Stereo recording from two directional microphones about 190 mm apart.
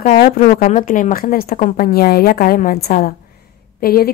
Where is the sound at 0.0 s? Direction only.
40° left (ahead or behind).